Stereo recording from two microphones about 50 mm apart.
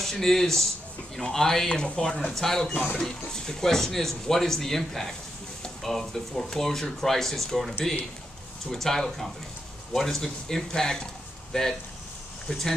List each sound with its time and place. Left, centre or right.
0.0 s speech: centre
1.7 s speech: centre
2.1 s speech: centre
2.7 s speech: left
3.0 s speech: centre